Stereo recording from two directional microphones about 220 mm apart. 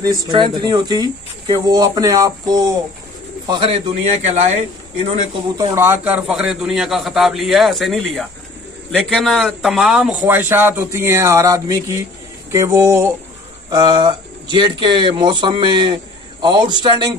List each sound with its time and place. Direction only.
0.0 s a man's voice: 20° right (ahead or behind)
5.6 s a man's voice: 15° right (ahead or behind)